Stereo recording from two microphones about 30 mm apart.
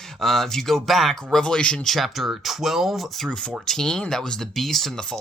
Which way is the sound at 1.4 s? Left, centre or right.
Left.